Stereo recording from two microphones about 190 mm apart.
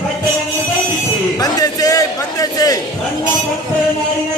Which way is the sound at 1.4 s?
20° left (ahead or behind).